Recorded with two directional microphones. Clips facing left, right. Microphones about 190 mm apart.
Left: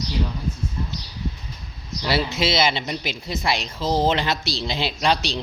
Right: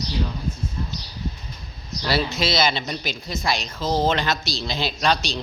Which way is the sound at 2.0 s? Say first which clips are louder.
Left 1 dB; 25° left (ahead or behind).